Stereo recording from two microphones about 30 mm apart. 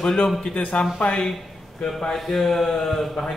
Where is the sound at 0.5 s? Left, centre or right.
Left.